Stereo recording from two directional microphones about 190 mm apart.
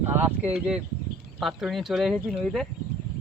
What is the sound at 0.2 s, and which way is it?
Speech, 10° right (ahead or behind).